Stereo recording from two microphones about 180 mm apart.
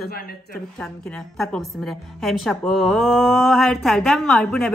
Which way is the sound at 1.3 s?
Centre (ahead or behind).